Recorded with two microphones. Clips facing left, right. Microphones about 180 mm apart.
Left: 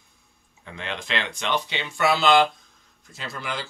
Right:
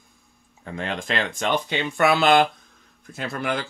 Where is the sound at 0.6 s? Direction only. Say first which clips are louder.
Right 4 dB; 45° right (ahead or behind).